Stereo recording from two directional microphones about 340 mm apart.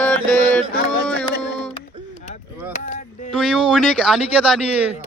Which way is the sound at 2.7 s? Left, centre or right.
Left.